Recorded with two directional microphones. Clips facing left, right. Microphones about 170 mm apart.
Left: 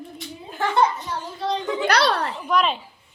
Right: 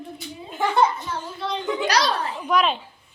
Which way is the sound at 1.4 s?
40° left (ahead or behind).